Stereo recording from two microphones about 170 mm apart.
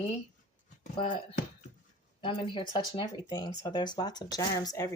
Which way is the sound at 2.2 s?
30° left (ahead or behind).